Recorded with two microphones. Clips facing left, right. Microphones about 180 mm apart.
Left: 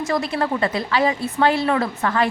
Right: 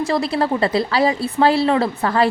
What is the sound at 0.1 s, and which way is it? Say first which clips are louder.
A woman's voice: right 1 dB; 30° right (ahead or behind).